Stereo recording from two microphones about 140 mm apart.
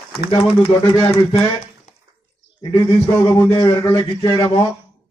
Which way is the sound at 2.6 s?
25° left (ahead or behind).